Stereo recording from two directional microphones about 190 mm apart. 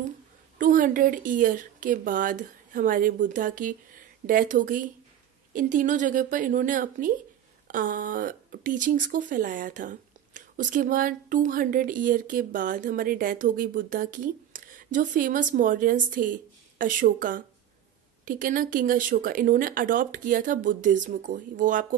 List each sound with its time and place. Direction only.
0.6 s speech: 45° right (ahead or behind)